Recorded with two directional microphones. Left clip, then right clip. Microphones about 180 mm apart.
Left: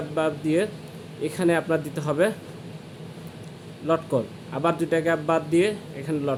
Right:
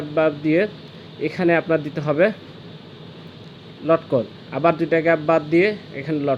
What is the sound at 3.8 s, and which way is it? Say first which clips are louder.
Speech: right 5 dB; 25° right (ahead or behind).